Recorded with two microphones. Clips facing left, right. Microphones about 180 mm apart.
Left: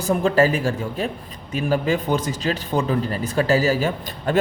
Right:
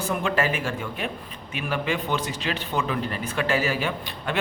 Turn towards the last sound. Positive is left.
turn(degrees=40)  # may be behind; listen again after turning